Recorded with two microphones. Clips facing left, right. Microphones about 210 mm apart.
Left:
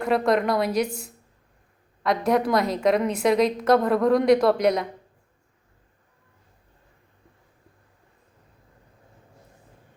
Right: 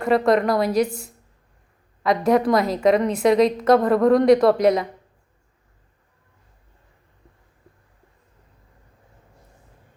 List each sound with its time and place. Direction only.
0.0 s a woman's voice: centre (ahead or behind)
2.0 s a woman's voice: centre (ahead or behind)